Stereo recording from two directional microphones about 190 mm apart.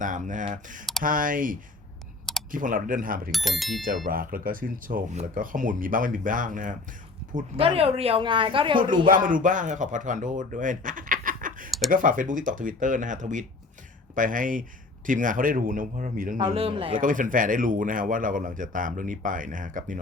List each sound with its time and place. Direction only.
0.0 s speech: 40° right (ahead or behind)
3.3 s speech: centre (ahead or behind)
4.0 s speech: 50° right (ahead or behind)
7.5 s speech: 30° right (ahead or behind)
9.0 s speech: 45° right (ahead or behind)
16.4 s speech: 30° right (ahead or behind)
17.0 s speech: 45° right (ahead or behind)